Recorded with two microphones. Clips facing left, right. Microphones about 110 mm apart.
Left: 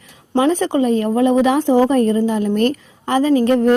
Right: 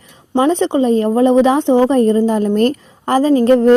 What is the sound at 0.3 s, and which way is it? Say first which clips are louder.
Speech: right 2 dB; 25° right (ahead or behind).